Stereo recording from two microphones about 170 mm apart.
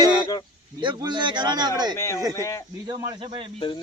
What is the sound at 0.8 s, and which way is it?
Speech, 25° right (ahead or behind).